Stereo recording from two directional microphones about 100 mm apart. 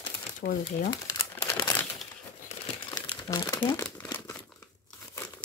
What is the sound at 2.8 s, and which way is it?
Crumpling, 45° left (ahead or behind).